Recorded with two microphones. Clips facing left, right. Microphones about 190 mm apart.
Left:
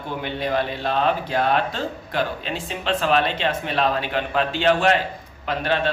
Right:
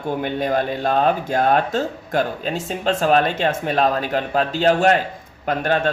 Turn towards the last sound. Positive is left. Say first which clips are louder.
# right 3 dB
turn(degrees=-45)  # may be behind; listen again after turning